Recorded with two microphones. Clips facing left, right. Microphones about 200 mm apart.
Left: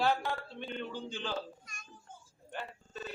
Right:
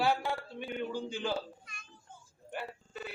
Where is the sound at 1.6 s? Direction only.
45° left (ahead or behind).